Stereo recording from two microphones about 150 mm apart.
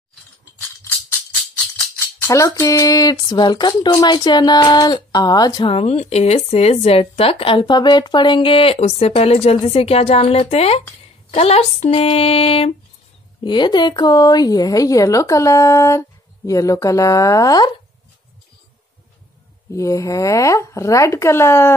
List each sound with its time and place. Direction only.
1.6 s speech: 15° left (ahead or behind); by 12.7 s 40° left (ahead or behind)
13.4 s speech: 30° left (ahead or behind)
19.7 s speech: 20° left (ahead or behind)